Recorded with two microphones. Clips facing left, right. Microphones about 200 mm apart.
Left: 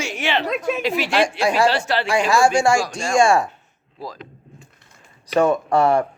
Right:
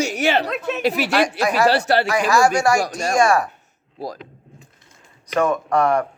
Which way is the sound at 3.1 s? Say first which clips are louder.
Left 1 dB; 25° left (ahead or behind).